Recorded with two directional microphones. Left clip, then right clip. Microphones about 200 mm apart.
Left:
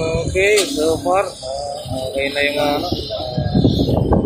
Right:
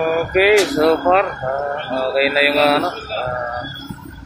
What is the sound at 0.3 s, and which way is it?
Speech, centre (ahead or behind).